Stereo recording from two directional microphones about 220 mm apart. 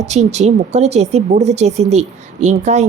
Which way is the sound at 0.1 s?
30° right (ahead or behind).